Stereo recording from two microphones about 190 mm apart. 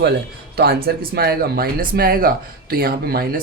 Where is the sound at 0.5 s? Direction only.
55° right (ahead or behind).